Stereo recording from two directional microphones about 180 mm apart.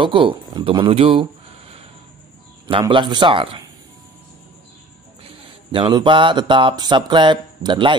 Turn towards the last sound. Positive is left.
turn(degrees=-25)  # may be behind; listen again after turning